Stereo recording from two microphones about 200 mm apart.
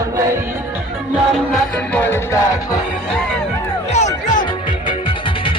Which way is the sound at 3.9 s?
35° left (ahead or behind).